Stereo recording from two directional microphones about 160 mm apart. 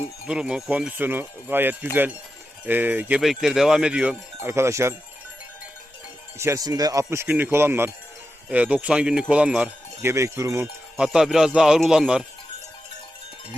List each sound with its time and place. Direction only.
0.3 s speech: 5° right (ahead or behind)
6.4 s speech: 20° right (ahead or behind)
10.9 s speech: 5° right (ahead or behind)